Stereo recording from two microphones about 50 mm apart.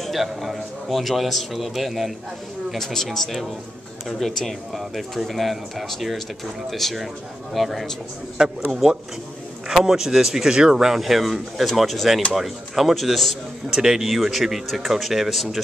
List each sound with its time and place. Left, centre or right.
0.0 s a man's voice: centre
2.7 s a man's voice: centre
8.4 s a man's voice: centre